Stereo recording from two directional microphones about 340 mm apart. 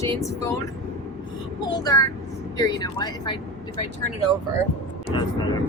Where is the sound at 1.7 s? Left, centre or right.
Centre.